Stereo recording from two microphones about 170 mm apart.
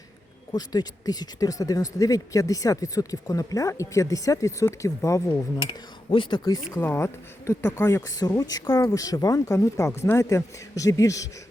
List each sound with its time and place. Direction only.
0.5 s speech: 20° left (ahead or behind)
6.7 s speech: 15° left (ahead or behind)